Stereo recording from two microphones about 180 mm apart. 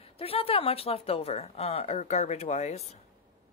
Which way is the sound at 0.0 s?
30° left (ahead or behind).